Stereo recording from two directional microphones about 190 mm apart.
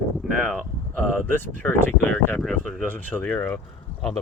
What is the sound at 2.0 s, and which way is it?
Speech, 5° left (ahead or behind).